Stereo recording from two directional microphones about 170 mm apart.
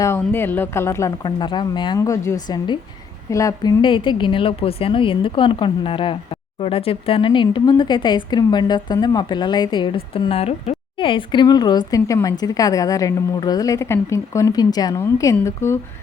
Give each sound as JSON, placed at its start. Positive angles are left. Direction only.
{"t": 0.0, "sound": "speech", "side_deg": 15}